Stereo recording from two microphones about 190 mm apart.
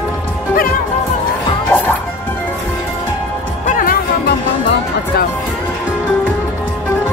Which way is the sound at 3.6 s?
45° left (ahead or behind).